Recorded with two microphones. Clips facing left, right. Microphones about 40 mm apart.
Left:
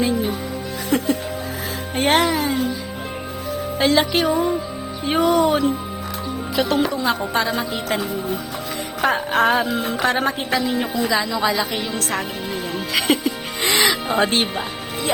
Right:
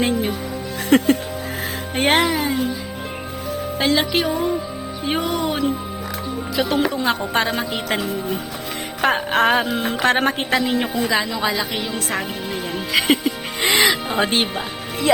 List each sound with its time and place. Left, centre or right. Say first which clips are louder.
0.0 s music: even; right
2.0 s music: even; centre
2.3 s music: even; centre
3.8 s music: left 2 dB; centre
6.9 s a woman's voice: even; right
7.5 s music: even; right
9.7 s speech: right 1 dB; right
10.0 s speech: right 3 dB; right
10.8 s a woman's voice: even; centre
11.3 s music: left 2 dB; centre
12.7 s music: right 2 dB; centre